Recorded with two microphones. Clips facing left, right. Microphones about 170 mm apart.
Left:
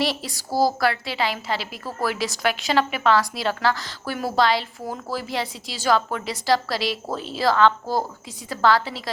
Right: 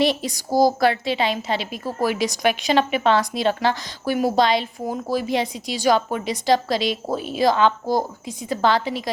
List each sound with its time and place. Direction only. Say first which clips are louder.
0.0 s a woman's voice: right 5 dB; 20° right (ahead or behind)